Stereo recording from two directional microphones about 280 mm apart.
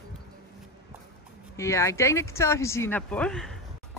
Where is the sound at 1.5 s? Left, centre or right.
Centre.